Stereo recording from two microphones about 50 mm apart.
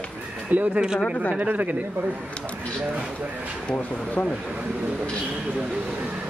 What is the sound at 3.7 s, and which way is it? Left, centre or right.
Speech, left.